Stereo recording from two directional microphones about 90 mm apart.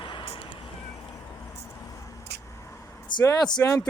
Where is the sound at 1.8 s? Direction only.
40° left (ahead or behind).